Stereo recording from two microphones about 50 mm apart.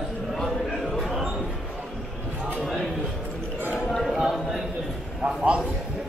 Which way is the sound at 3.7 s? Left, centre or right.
Centre.